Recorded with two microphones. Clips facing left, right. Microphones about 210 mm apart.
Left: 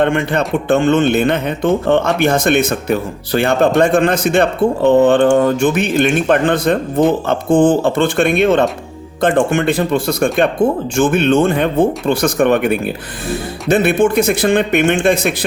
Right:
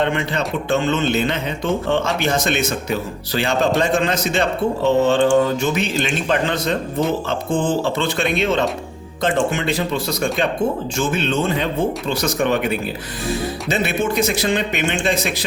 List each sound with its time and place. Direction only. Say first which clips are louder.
0.0 s speech: left 6 dB; 55° left (ahead or behind)